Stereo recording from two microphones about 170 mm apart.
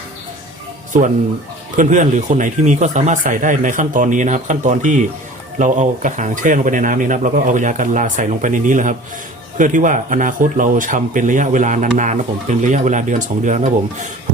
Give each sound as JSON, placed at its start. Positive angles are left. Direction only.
{"t": 0.9, "sound": "speech", "side_deg": -45}